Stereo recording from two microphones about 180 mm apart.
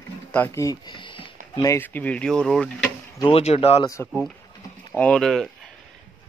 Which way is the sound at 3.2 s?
30° left (ahead or behind).